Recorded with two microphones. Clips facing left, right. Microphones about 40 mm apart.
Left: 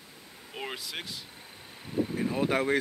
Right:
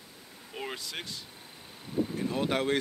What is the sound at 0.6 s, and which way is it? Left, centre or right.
Speech, centre.